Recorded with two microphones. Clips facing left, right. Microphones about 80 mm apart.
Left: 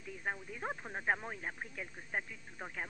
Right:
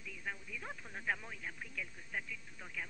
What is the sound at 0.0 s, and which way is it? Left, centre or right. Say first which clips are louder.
Speech: left 5 dB; left.